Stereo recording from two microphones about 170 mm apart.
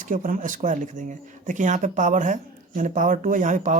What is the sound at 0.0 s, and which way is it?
Speech, 50° right (ahead or behind).